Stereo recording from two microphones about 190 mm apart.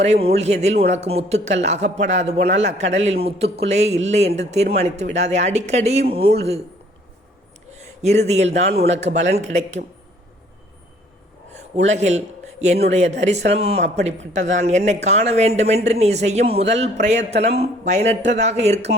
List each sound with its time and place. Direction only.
0.0 s a man's voice: 35° right (ahead or behind)
7.8 s a man's voice: 35° right (ahead or behind)
11.5 s a man's voice: 35° right (ahead or behind)